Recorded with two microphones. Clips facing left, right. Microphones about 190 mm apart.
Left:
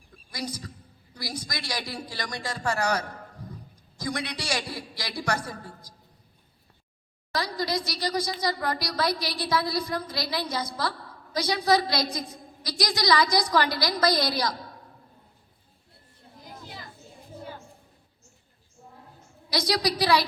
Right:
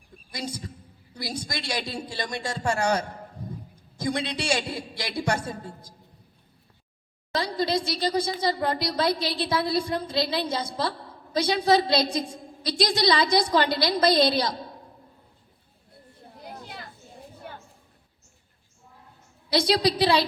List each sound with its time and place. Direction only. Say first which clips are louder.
0.3 s a woman's voice: right 1 dB; 25° right (ahead or behind)
7.3 s a woman's voice: right 3 dB; 25° right (ahead or behind)
16.4 s children playing: right 3 dB; 60° right (ahead or behind)
19.5 s a woman's voice: right 4 dB; 25° right (ahead or behind)